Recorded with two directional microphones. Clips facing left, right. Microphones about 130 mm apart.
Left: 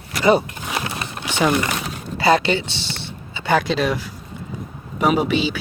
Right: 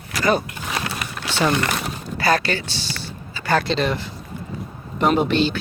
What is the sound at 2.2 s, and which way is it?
Speech, 20° left (ahead or behind).